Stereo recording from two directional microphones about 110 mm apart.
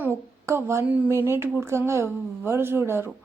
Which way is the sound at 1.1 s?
25° right (ahead or behind).